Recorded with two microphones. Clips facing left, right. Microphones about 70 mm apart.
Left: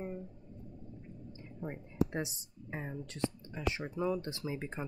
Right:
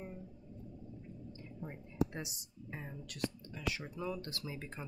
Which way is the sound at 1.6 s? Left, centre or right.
Left.